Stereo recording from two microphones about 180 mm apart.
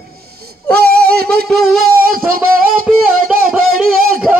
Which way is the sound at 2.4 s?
55° right (ahead or behind).